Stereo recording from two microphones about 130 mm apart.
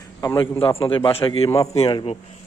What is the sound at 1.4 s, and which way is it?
Speech, 25° left (ahead or behind).